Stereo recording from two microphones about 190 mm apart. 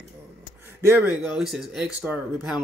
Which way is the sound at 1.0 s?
5° right (ahead or behind).